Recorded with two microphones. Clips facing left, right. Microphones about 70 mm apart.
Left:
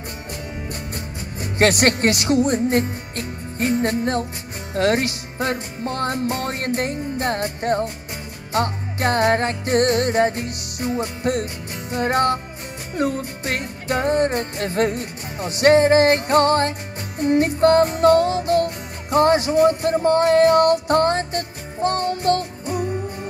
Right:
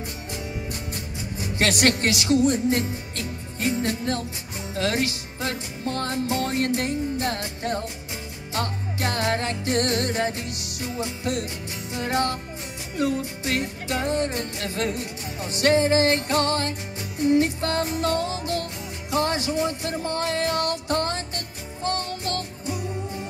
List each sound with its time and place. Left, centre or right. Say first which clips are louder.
1.4 s speech: left 5 dB; left
2.3 s music: even; left
4.7 s speech: left 6 dB; left
11.9 s music: left 6 dB; left